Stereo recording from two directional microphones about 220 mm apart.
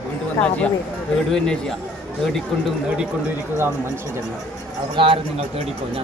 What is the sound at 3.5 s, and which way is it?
Speech, 10° right (ahead or behind).